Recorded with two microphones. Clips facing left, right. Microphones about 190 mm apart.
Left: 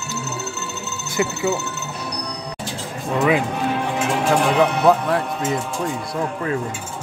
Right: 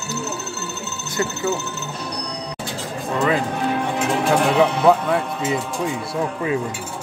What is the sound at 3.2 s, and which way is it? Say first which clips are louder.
Speech: left 2 dB; 10° left (ahead or behind).